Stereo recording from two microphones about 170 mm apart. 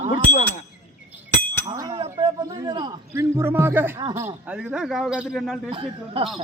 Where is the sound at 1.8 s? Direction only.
25° right (ahead or behind).